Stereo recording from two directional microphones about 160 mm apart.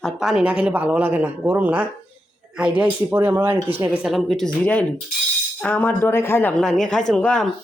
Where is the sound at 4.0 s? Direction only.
Centre (ahead or behind).